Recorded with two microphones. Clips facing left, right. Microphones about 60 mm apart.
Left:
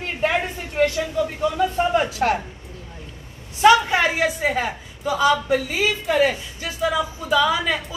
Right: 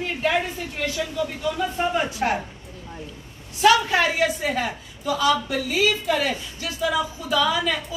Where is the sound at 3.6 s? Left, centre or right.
Left.